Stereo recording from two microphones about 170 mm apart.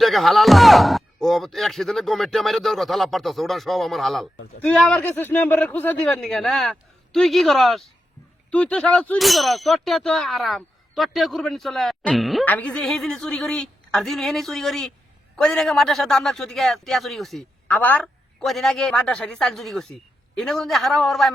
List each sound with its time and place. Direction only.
0.0 s clang: centre (ahead or behind)